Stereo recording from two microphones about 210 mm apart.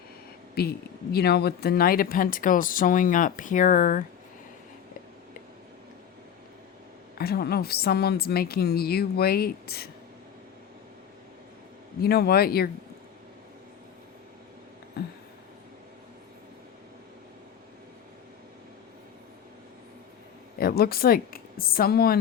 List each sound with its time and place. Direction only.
0.6 s a woman's voice: 50° left (ahead or behind)
7.2 s a woman's voice: 45° left (ahead or behind)
12.0 s a woman's voice: 50° left (ahead or behind)
20.6 s speech: 45° left (ahead or behind)